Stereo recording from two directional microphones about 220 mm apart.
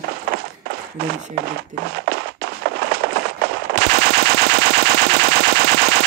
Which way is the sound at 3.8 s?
45° right (ahead or behind).